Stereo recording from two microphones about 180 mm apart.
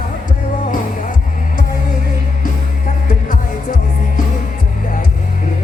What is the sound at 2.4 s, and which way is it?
Music, 50° left (ahead or behind).